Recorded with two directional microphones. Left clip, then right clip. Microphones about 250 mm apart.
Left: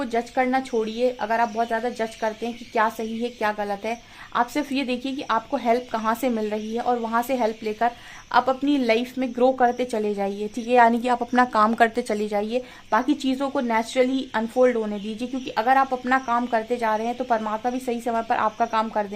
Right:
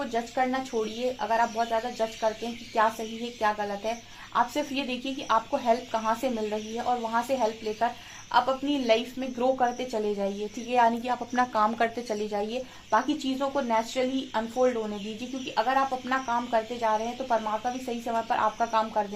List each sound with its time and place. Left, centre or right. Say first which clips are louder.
0.0 s a woman's voice: left 4 dB; left
3.4 s a woman's voice: left 1 dB; left